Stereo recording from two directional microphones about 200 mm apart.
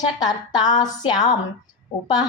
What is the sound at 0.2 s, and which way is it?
A woman's voice, 20° left (ahead or behind).